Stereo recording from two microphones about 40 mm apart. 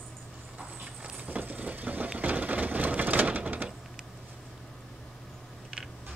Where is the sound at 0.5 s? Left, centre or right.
Right.